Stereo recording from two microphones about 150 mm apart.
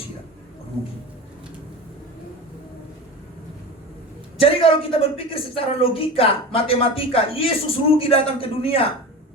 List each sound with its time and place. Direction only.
4.4 s speech: 40° left (ahead or behind)